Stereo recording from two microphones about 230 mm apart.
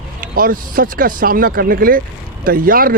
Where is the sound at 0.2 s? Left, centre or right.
Right.